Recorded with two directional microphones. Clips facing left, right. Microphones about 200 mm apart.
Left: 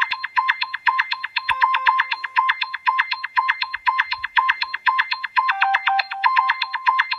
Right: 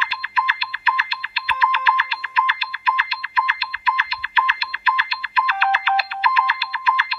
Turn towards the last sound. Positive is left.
turn(degrees=-50)  # may be behind; listen again after turning